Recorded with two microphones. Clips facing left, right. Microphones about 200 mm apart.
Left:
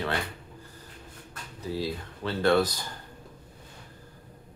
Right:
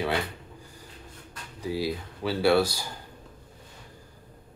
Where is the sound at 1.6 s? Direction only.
10° right (ahead or behind).